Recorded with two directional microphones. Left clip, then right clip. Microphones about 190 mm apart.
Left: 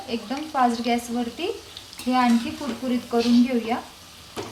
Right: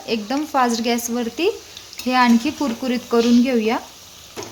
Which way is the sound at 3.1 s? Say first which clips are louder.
Right 5 dB; 55° right (ahead or behind).